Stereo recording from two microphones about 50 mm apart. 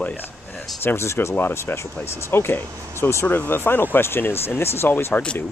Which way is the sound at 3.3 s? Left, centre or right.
Left.